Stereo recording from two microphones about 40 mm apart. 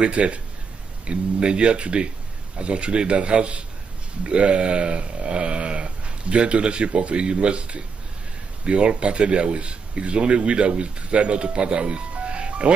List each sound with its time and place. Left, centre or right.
0.0 s speech: right